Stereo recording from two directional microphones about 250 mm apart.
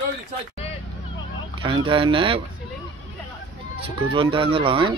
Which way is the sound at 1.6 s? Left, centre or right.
Centre.